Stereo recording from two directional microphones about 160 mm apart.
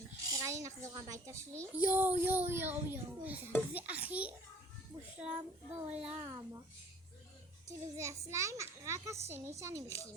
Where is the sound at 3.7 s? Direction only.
10° right (ahead or behind).